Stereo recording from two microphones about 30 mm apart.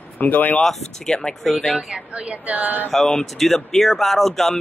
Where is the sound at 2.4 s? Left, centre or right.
Right.